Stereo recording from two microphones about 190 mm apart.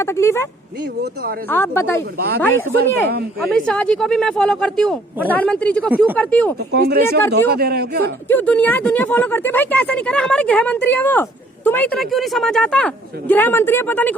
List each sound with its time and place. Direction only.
0.0 s speech: 15° left (ahead or behind)
1.5 s speech: 10° left (ahead or behind)
2.1 s a man's voice: 55° right (ahead or behind)
2.4 s speech: 10° left (ahead or behind)
6.7 s a man's voice: 55° right (ahead or behind)
8.3 s speech: 10° left (ahead or behind)